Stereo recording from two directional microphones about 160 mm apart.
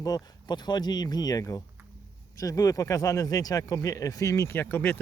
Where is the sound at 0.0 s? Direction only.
25° left (ahead or behind).